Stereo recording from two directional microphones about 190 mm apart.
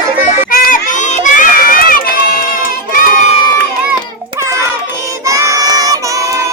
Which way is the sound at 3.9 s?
15° right (ahead or behind).